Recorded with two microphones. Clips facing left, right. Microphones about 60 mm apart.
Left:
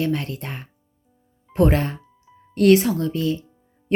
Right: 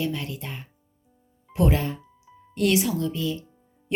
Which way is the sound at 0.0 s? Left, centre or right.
Left.